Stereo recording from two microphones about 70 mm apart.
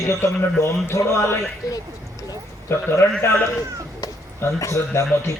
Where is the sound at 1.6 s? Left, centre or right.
Left.